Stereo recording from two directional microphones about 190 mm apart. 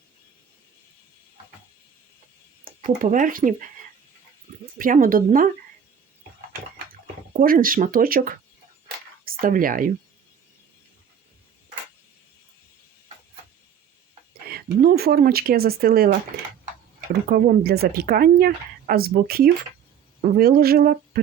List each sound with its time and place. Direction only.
2.6 s speech: 45° right (ahead or behind)
4.8 s speech: 45° right (ahead or behind)
7.3 s speech: 50° right (ahead or behind)
14.5 s speech: 50° right (ahead or behind)